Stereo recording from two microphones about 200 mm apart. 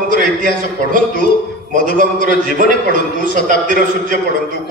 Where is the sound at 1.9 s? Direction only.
45° right (ahead or behind).